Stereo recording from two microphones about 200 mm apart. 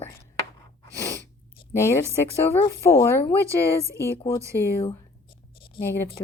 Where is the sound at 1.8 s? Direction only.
15° left (ahead or behind).